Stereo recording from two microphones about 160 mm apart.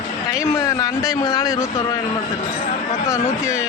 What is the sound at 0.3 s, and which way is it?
A man's voice, 20° left (ahead or behind).